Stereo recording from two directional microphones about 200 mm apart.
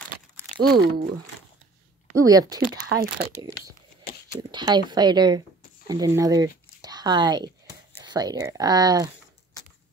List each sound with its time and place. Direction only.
0.6 s speech: 50° right (ahead or behind)
2.1 s speech: 20° right (ahead or behind)
3.2 s speech: 55° right (ahead or behind)
4.4 s speech: 20° right (ahead or behind)